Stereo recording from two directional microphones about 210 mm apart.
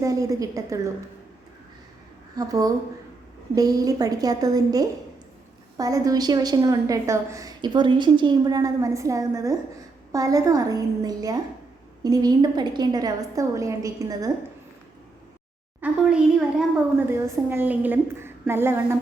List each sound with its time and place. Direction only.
0.0 s a woman's voice: 15° right (ahead or behind)
2.3 s a woman's voice: 15° right (ahead or behind)
15.8 s a woman's voice: 5° right (ahead or behind)